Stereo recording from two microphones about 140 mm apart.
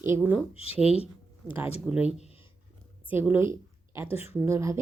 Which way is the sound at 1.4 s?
10° left (ahead or behind).